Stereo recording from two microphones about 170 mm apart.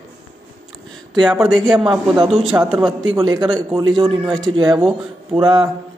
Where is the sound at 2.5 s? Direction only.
15° right (ahead or behind).